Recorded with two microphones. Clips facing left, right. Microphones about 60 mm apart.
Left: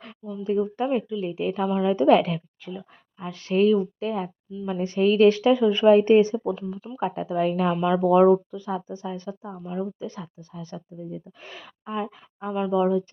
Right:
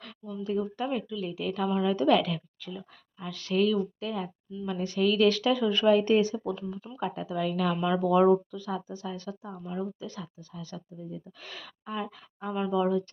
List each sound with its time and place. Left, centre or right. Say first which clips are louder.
0.4 s speech: left 6 dB; left
1.6 s speech: left 3 dB; centre
1.9 s a woman's voice: left 7 dB; left
6.5 s speech: left 5 dB; centre
7.0 s a woman's voice: left 6 dB; left
7.8 s speech: left 5 dB; centre
8.0 s speech: left 5 dB; left